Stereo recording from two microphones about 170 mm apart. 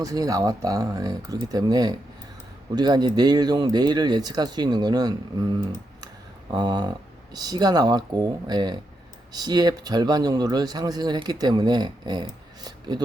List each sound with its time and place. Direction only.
0.0 s speech: 20° right (ahead or behind)
6.5 s speech: 25° right (ahead or behind)